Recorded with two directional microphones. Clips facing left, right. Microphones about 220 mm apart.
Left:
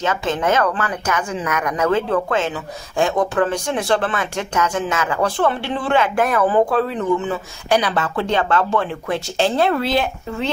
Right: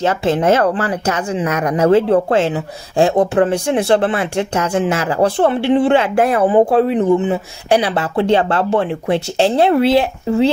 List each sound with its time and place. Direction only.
0.0 s speech: 30° right (ahead or behind)